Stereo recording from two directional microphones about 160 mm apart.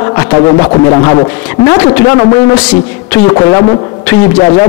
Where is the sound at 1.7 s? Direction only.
20° left (ahead or behind).